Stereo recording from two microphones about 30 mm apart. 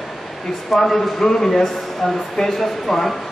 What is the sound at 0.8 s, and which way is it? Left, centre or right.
Speech, centre.